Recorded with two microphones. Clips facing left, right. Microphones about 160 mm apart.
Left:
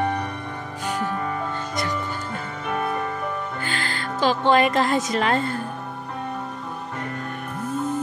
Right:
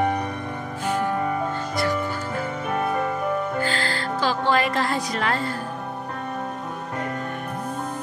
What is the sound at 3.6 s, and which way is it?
Music, 20° left (ahead or behind).